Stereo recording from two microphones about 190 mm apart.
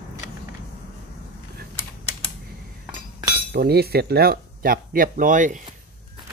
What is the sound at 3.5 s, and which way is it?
Speech, 55° right (ahead or behind).